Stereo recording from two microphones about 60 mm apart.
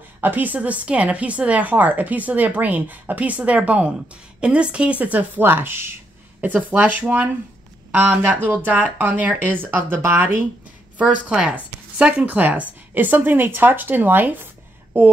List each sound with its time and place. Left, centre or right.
0.2 s a woman's voice: right
11.0 s a woman's voice: right